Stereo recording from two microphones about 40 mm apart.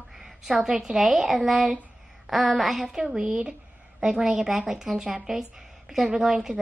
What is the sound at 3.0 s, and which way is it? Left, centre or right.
Speech, right.